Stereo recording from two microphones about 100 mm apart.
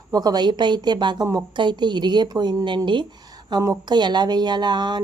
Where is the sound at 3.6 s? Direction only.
40° right (ahead or behind).